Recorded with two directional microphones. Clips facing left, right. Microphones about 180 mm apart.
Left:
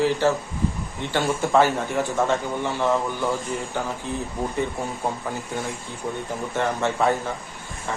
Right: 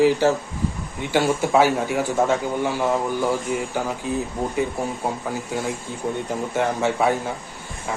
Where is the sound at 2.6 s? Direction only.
15° right (ahead or behind).